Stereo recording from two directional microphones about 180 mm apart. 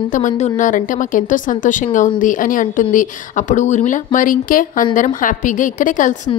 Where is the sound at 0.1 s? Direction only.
45° left (ahead or behind).